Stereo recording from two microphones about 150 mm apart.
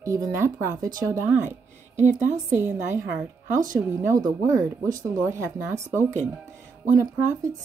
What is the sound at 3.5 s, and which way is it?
Speech, 60° right (ahead or behind).